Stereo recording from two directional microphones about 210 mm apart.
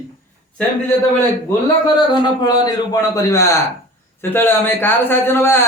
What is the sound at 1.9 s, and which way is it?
A man's voice, 20° left (ahead or behind).